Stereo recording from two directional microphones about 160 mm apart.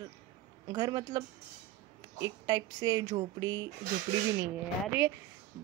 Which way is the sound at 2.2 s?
25° right (ahead or behind).